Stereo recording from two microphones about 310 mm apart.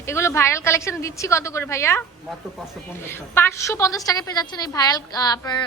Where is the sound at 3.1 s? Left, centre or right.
Centre.